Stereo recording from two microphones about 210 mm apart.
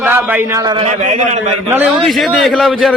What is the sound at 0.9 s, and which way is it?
Speech, 35° right (ahead or behind).